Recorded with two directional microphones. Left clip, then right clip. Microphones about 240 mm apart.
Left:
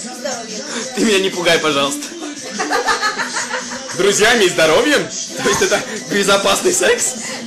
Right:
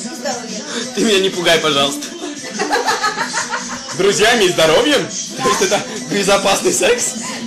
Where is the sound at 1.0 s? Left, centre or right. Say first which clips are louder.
Right 1 dB; centre.